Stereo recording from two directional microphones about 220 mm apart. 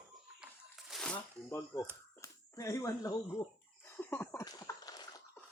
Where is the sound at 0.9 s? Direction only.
5° left (ahead or behind).